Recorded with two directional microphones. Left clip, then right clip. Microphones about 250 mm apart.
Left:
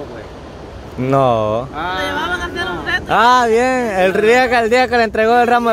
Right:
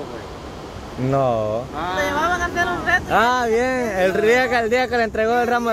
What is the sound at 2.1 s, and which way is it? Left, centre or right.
Speech, centre.